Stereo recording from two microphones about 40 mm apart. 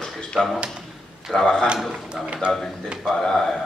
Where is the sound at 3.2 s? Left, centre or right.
Centre.